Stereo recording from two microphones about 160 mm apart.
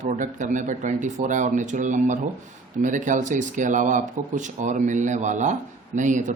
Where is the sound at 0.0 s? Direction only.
50° right (ahead or behind).